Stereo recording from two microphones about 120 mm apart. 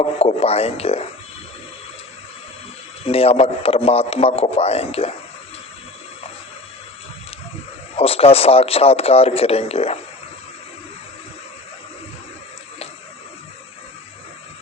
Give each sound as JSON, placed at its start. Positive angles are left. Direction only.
{"t": 0.2, "sound": "a man's voice", "side_deg": 55}
{"t": 3.0, "sound": "a man's voice", "side_deg": 55}
{"t": 7.9, "sound": "a man's voice", "side_deg": 55}